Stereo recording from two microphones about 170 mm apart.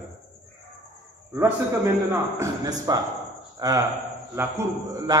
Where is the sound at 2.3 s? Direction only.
20° right (ahead or behind).